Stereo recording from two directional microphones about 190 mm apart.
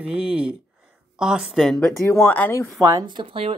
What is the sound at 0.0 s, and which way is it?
A woman's voice, 5° right (ahead or behind).